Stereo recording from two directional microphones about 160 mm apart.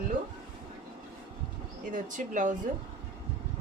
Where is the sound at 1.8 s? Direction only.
55° right (ahead or behind).